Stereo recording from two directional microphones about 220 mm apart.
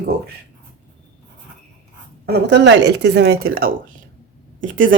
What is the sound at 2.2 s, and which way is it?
Speech, 50° right (ahead or behind).